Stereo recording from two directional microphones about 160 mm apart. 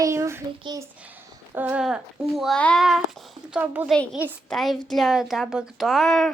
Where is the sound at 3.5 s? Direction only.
10° right (ahead or behind).